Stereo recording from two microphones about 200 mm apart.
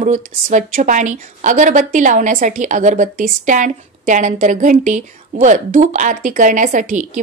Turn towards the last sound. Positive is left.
turn(degrees=-40)  # may be behind; listen again after turning